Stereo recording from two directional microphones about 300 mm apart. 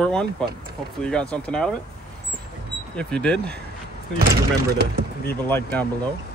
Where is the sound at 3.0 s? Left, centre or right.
Centre.